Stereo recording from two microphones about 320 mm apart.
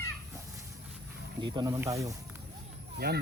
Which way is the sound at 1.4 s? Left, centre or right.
Centre.